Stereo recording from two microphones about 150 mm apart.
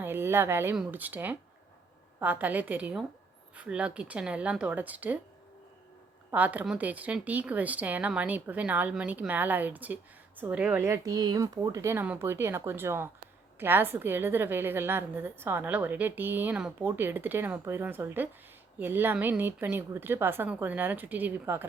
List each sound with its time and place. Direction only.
0.0 s a sound: 15° right (ahead or behind)
0.8 s a woman's voice: 10° right (ahead or behind)
6.3 s a woman's voice: 10° right (ahead or behind)